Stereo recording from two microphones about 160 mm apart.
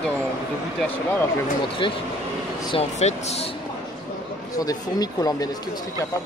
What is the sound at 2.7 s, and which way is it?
Speech, 40° left (ahead or behind).